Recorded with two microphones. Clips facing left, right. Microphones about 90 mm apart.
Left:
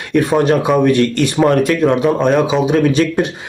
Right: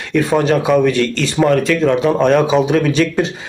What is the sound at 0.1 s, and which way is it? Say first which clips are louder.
A man's voice: left 1 dB; 15° left (ahead or behind).